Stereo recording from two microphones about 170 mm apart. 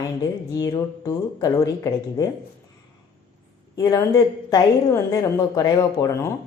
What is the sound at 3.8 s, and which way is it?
A woman's voice, 20° left (ahead or behind).